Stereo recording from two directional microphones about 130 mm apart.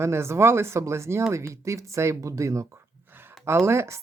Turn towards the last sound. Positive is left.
turn(degrees=-20)  # may be behind; listen again after turning